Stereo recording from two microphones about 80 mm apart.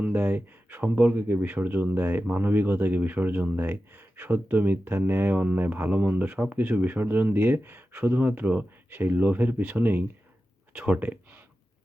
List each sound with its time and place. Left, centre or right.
0.0 s speech: right